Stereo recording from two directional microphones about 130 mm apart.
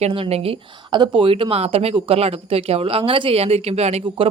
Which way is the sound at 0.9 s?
35° right (ahead or behind).